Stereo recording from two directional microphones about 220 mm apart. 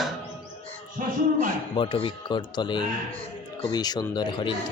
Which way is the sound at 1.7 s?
20° left (ahead or behind).